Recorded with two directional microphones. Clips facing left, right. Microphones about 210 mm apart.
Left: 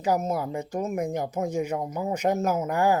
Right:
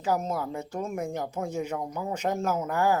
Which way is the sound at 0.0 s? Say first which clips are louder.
Left 3 dB; 10° left (ahead or behind).